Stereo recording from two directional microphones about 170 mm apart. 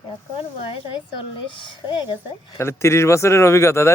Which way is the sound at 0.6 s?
30° left (ahead or behind).